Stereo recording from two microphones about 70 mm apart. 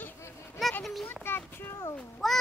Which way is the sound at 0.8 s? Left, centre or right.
Centre.